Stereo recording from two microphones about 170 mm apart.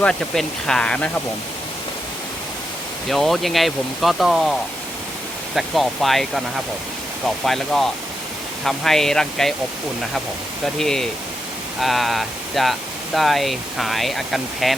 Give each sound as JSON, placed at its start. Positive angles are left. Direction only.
{"t": 0.0, "sound": "speech", "side_deg": 5}
{"t": 3.1, "sound": "speech", "side_deg": 0}
{"t": 5.5, "sound": "speech", "side_deg": 0}
{"t": 7.4, "sound": "speech", "side_deg": 0}
{"t": 10.8, "sound": "speech", "side_deg": 5}